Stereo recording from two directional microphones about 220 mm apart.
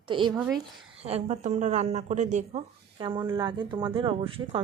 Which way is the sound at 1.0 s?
30° right (ahead or behind).